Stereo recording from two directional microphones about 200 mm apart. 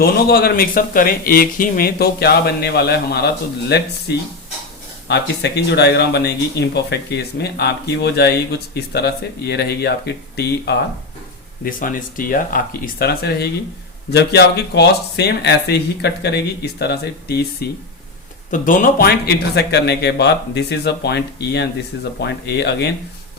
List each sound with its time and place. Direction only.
0.0 s speech: 50° left (ahead or behind)
5.0 s speech: 55° left (ahead or behind)
11.6 s speech: 45° left (ahead or behind)
18.5 s speech: 40° left (ahead or behind)